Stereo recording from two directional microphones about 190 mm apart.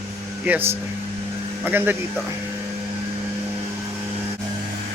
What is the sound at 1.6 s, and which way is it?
Speech, 10° right (ahead or behind).